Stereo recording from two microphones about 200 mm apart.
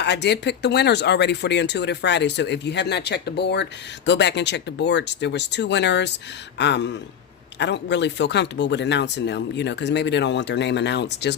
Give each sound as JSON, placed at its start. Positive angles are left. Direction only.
{"t": 0.0, "sound": "speech", "side_deg": 60}